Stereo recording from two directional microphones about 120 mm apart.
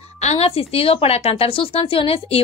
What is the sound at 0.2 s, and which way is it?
Speech, 60° left (ahead or behind).